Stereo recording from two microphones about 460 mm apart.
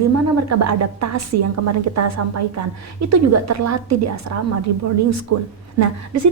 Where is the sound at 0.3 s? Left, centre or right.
Right.